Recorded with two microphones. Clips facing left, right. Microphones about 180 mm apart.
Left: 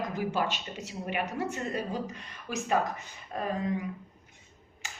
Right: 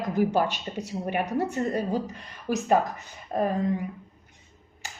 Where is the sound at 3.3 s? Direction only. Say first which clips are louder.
Right 9 dB; 40° right (ahead or behind).